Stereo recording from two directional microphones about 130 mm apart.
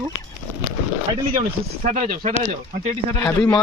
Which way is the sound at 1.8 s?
75° right (ahead or behind).